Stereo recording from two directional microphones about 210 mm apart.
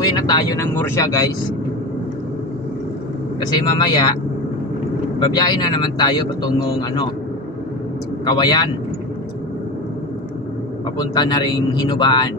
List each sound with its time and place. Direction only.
0.0 s speech: 20° left (ahead or behind)
3.3 s speech: 20° left (ahead or behind)
5.2 s speech: 20° left (ahead or behind)
8.3 s speech: 20° left (ahead or behind)
11.0 s speech: 20° left (ahead or behind)